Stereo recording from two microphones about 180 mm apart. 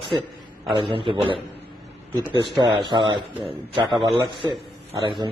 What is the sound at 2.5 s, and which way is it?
A man's voice, 25° right (ahead or behind).